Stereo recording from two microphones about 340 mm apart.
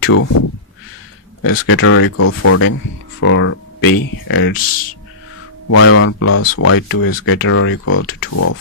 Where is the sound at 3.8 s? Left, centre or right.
Left.